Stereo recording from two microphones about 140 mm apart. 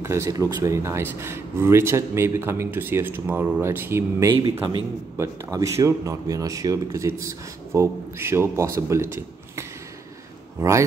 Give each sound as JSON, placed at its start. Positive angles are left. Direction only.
{"t": 0.0, "sound": "speech", "side_deg": -20}